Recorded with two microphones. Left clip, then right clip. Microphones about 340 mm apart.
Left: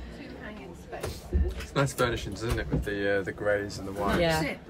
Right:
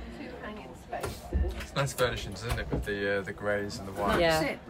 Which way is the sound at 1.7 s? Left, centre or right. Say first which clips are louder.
Left 2 dB; centre.